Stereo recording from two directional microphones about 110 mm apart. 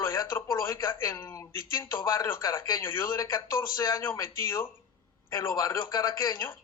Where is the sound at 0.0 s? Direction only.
25° left (ahead or behind).